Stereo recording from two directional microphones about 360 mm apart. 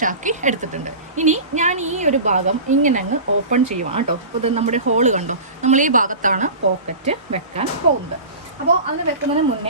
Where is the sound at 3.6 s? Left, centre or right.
Right.